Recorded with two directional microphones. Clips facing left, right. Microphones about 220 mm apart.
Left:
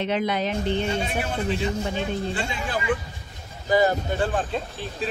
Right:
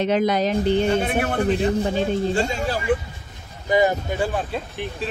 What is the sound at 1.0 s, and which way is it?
Speech, 55° right (ahead or behind).